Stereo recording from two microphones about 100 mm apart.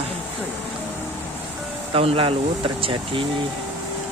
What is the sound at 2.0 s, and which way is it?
Speech, 70° right (ahead or behind).